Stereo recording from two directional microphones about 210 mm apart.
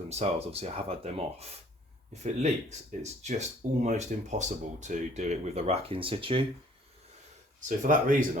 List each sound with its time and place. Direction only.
0.1 s speech: 30° right (ahead or behind)
7.8 s speech: 40° right (ahead or behind)